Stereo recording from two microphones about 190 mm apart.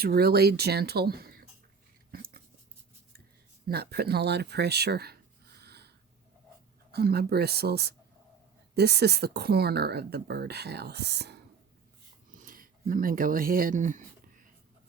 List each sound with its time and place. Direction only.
0.0 s speech: 55° right (ahead or behind)
2.1 s a sound: 50° right (ahead or behind)
3.7 s speech: 55° right (ahead or behind)
6.9 s speech: 55° right (ahead or behind)
12.4 s speech: 45° right (ahead or behind)